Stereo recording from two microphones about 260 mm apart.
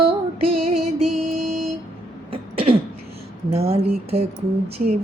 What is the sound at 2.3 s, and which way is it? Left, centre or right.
Throat clearing, right.